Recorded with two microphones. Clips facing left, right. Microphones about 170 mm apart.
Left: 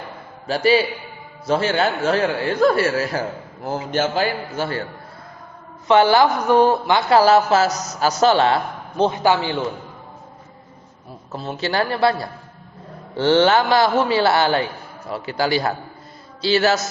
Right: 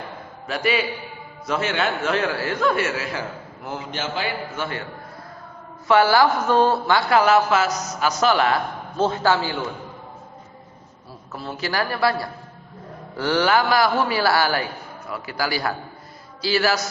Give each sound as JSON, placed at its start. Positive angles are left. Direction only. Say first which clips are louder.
{"t": 0.4, "sound": "a man's voice", "louder": "left 6 dB", "side_deg": 30}
{"t": 5.9, "sound": "speech", "louder": "left 2 dB", "side_deg": 20}
{"t": 7.1, "sound": "a man's voice", "louder": "left 4 dB", "side_deg": 30}
{"t": 9.0, "sound": "speech", "louder": "left 2 dB", "side_deg": 15}
{"t": 11.3, "sound": "a man's voice", "louder": "left 4 dB", "side_deg": 25}